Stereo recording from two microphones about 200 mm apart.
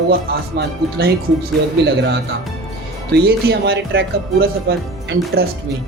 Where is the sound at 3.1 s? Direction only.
55° right (ahead or behind).